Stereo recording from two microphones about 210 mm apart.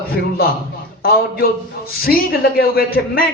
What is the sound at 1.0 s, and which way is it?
A man's voice, 45° left (ahead or behind).